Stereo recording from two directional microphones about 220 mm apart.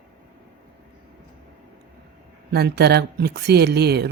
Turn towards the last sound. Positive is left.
turn(degrees=-45)  # may be behind; listen again after turning